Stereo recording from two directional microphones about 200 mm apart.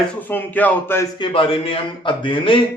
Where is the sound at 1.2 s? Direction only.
25° left (ahead or behind).